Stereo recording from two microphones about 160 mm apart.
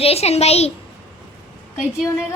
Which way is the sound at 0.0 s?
40° left (ahead or behind).